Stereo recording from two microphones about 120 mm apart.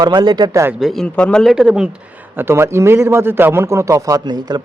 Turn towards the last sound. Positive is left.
turn(degrees=-35)  # may be behind; listen again after turning